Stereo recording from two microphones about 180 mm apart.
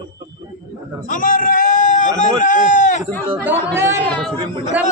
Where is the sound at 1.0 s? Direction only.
50° left (ahead or behind).